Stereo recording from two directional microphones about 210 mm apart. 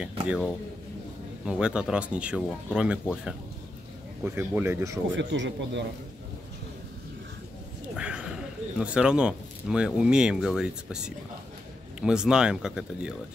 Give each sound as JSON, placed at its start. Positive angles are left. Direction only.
{"t": 1.4, "sound": "speech", "side_deg": -5}
{"t": 5.1, "sound": "speech", "side_deg": -60}
{"t": 7.9, "sound": "speech", "side_deg": -5}